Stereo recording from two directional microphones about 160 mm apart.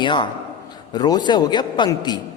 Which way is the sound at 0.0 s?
30° left (ahead or behind).